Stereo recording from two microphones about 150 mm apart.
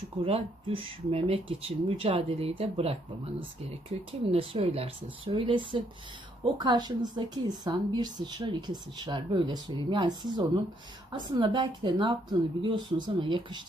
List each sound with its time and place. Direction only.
0.2 s a woman's voice: 40° right (ahead or behind)